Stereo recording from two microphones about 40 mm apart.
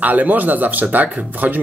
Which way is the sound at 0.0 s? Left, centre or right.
Right.